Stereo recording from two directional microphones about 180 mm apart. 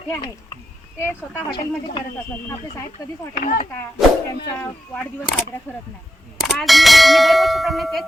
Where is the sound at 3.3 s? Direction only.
45° left (ahead or behind).